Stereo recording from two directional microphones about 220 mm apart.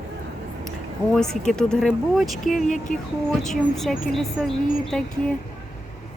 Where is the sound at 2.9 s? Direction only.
35° left (ahead or behind).